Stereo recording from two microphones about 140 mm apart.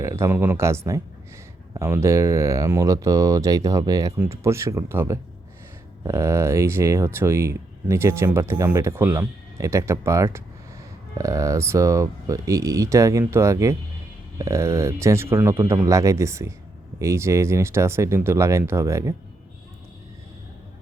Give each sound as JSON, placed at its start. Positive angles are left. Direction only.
{"t": 0.0, "sound": "speech", "side_deg": -20}